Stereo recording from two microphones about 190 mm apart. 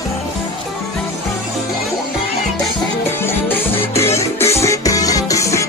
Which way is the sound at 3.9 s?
15° left (ahead or behind).